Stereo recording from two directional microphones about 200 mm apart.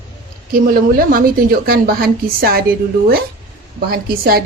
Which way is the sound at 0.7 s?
45° right (ahead or behind).